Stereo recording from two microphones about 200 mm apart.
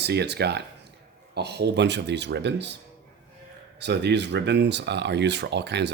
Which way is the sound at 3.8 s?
60° right (ahead or behind).